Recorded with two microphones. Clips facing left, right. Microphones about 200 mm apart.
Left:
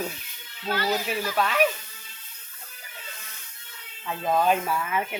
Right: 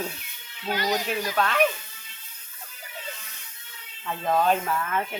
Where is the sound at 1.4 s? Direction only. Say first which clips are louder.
Even; 5° left (ahead or behind).